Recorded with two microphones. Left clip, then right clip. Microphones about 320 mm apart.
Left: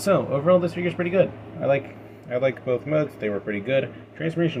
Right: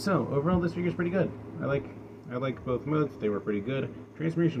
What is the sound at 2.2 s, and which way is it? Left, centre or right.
Speech, centre.